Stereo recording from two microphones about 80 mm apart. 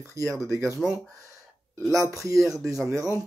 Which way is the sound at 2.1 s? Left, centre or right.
Right.